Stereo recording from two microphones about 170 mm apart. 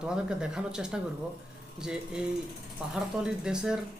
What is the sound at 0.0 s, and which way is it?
Speech, 5° right (ahead or behind).